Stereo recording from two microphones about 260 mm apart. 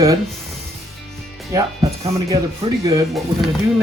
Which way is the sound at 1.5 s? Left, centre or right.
Centre.